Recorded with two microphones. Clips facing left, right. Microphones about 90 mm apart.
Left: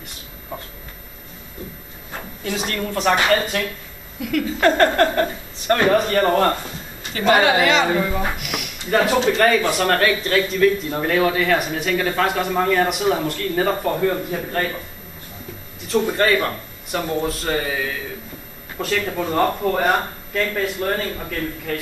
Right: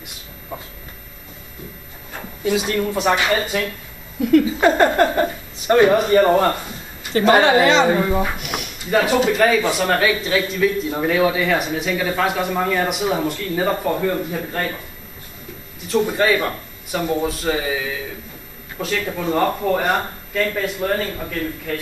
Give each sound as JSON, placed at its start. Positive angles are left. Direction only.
{"t": 2.4, "sound": "speech", "side_deg": -10}
{"t": 4.2, "sound": "a woman's voice", "side_deg": -35}
{"t": 4.6, "sound": "speech", "side_deg": -10}
{"t": 7.2, "sound": "a woman's voice", "side_deg": -35}
{"t": 8.4, "sound": "a sound", "side_deg": -30}
{"t": 8.9, "sound": "speech", "side_deg": -5}
{"t": 15.9, "sound": "speech", "side_deg": 0}